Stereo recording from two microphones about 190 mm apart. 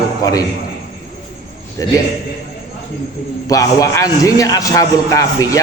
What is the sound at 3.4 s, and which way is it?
A man's voice, 20° left (ahead or behind).